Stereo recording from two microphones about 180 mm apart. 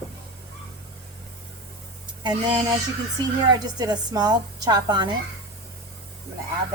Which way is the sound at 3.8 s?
20° right (ahead or behind).